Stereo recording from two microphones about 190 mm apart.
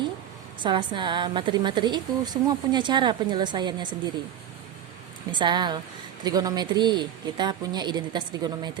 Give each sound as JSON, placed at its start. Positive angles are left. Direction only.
{"t": 0.6, "sound": "a woman's voice", "side_deg": -25}
{"t": 5.3, "sound": "a woman's voice", "side_deg": -25}